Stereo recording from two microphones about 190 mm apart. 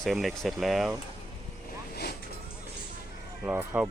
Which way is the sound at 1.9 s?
55° left (ahead or behind).